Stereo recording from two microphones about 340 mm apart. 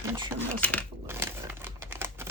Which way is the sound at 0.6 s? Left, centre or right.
Centre.